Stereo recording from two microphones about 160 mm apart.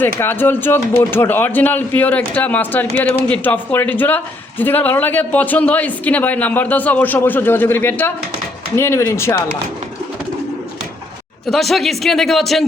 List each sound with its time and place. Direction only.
0.2 s speech: 10° left (ahead or behind)
11.5 s speech: centre (ahead or behind)